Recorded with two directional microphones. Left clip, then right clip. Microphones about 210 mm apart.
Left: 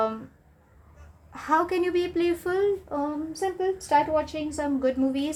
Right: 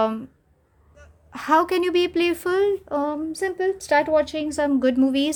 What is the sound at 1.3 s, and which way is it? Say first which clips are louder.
Speech: right 5 dB; 45° right (ahead or behind).